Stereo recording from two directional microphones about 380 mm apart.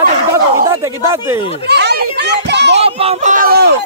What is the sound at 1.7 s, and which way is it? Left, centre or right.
Children playing, right.